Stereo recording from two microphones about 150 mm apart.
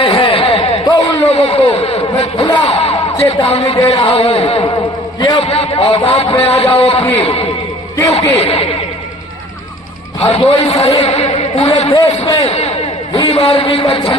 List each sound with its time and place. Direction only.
0.0 s a sound: 35° left (ahead or behind)
1.2 s a man's voice: 40° left (ahead or behind)
10.2 s a man's voice: 40° left (ahead or behind)